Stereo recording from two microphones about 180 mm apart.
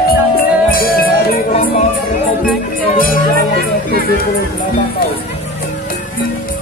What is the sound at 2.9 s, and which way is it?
Music, 50° left (ahead or behind).